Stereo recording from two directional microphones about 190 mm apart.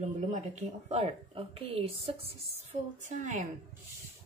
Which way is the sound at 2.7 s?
40° right (ahead or behind).